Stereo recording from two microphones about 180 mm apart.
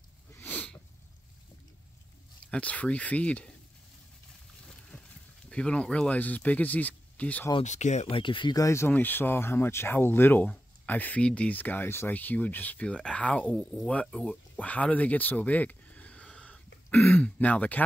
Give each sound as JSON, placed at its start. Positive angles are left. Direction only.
{"t": 0.4, "sound": "a sound", "side_deg": 10}
{"t": 2.4, "sound": "speech", "side_deg": 5}
{"t": 5.5, "sound": "speech", "side_deg": 5}
{"t": 7.6, "sound": "speech", "side_deg": 40}